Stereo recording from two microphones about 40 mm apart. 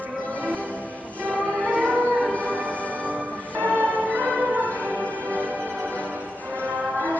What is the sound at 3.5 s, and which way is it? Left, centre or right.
Music, right.